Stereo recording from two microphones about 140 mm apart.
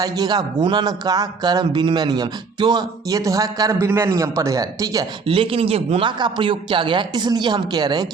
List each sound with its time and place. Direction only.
0.0 s speech: 30° right (ahead or behind)
5.2 s a man's voice: 40° right (ahead or behind)